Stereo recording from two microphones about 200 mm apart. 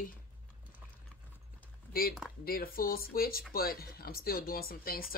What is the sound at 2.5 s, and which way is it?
Speech, 45° left (ahead or behind).